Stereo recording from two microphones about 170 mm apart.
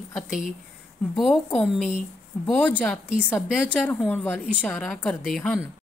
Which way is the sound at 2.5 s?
10° left (ahead or behind).